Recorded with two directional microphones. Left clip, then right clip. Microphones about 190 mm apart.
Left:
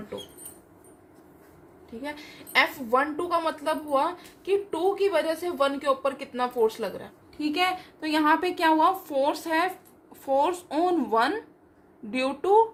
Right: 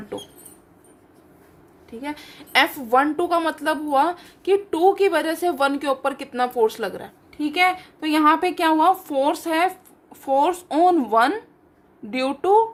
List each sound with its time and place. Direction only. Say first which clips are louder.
2.0 s a woman's voice: right 4 dB; 40° right (ahead or behind)
7.3 s a woman's voice: right 6 dB; 25° right (ahead or behind)